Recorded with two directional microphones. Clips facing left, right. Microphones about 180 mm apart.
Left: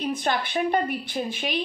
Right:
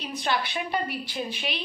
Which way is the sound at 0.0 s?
50° left (ahead or behind).